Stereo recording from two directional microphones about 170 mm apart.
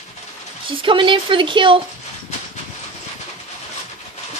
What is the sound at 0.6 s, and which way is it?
Speech, 30° right (ahead or behind).